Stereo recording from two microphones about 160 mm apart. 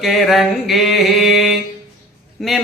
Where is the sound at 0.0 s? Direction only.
Centre (ahead or behind).